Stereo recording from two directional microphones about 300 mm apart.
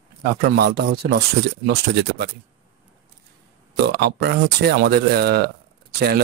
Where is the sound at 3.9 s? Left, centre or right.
Right.